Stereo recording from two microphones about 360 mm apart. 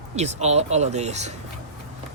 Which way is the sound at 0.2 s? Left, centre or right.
Centre.